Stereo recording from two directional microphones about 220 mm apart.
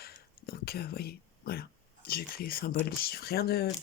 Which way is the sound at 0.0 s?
45° left (ahead or behind).